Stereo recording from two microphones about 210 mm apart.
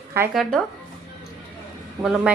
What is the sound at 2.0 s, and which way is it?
Speech, 5° right (ahead or behind).